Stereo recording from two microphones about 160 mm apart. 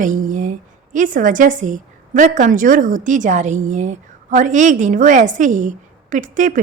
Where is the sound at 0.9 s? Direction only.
55° right (ahead or behind).